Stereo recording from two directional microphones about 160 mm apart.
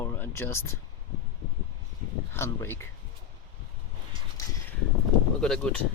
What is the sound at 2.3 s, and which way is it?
Speech, 15° left (ahead or behind).